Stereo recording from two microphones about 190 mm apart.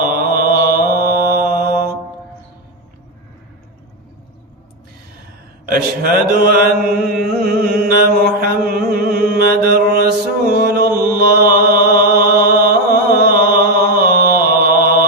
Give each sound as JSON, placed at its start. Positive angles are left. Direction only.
{"t": 0.0, "sound": "mantra", "side_deg": -50}
{"t": 5.6, "sound": "a man's voice", "side_deg": -50}
{"t": 6.5, "sound": "mantra", "side_deg": -50}